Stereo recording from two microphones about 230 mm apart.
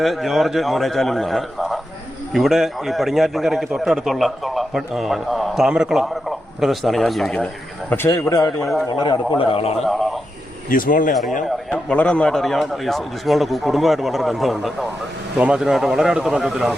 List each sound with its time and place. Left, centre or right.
0.0 s a man's voice: centre; by 9.7 s left
9.7 s a man's voice: centre
10.7 s speech: left
11.4 s a man's voice: centre